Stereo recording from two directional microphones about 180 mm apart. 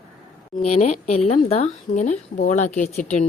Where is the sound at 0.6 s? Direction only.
35° left (ahead or behind).